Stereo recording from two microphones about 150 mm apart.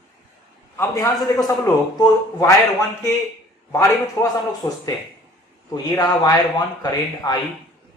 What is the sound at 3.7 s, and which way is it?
A man's voice, 20° left (ahead or behind).